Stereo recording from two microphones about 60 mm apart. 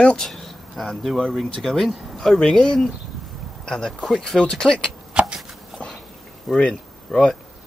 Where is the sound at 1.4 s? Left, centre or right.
Centre.